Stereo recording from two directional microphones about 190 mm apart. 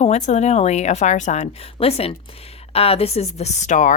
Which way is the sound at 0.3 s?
35° left (ahead or behind).